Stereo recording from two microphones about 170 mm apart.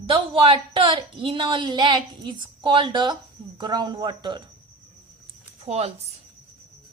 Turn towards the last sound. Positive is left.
turn(degrees=-40)  # may be behind; listen again after turning